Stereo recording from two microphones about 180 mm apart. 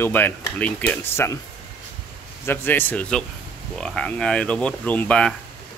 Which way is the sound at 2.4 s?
10° left (ahead or behind).